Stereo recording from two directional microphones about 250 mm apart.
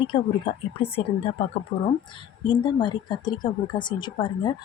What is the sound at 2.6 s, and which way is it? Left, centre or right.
Speech, centre.